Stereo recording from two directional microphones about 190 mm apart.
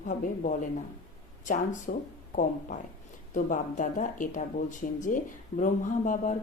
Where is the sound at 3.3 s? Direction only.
40° left (ahead or behind).